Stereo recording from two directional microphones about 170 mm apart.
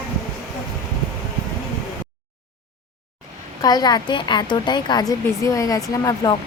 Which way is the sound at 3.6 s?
25° left (ahead or behind).